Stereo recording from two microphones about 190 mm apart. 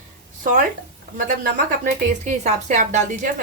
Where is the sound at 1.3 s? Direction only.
45° right (ahead or behind).